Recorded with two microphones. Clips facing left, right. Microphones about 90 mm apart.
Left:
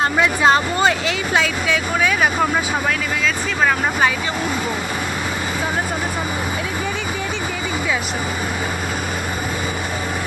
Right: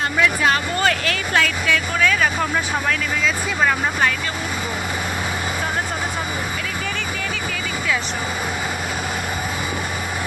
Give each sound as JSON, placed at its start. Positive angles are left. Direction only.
{"t": 0.2, "sound": "speech", "side_deg": 25}
{"t": 3.2, "sound": "speech", "side_deg": 0}